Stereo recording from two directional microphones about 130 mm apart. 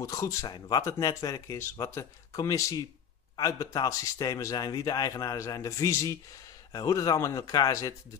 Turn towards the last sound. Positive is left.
turn(degrees=25)  # may be behind; listen again after turning